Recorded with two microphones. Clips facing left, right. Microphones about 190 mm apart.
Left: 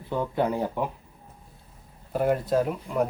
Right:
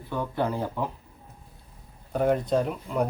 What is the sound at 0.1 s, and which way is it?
Speech, 20° left (ahead or behind).